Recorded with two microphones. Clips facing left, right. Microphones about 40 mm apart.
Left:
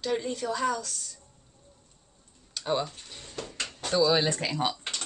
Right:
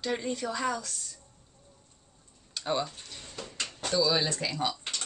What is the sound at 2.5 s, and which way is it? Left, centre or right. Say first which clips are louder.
Tick-tock: left 2 dB; centre.